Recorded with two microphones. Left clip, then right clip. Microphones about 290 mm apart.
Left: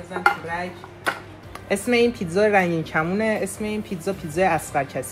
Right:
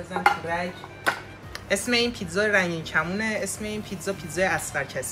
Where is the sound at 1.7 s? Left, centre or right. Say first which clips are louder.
Left 4 dB; centre.